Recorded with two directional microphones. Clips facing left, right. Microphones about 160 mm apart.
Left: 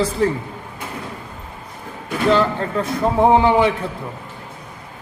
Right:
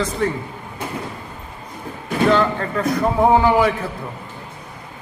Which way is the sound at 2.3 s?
Centre (ahead or behind).